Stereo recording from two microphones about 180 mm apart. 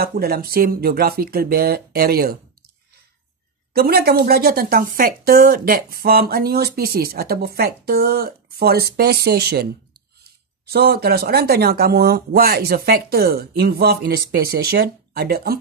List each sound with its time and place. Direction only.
0.0 s a woman's voice: 60° right (ahead or behind)
3.7 s a woman's voice: 60° right (ahead or behind)
10.7 s a woman's voice: 60° right (ahead or behind)